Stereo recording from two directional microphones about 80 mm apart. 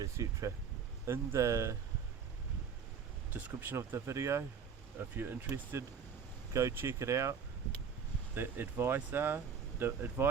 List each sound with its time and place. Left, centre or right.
0.0 s speech: right
3.3 s speech: right
3.8 s speech: right
4.9 s speech: right
5.8 s speech: right
8.4 s speech: right